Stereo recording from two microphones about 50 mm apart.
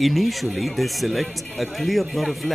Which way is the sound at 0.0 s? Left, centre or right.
Centre.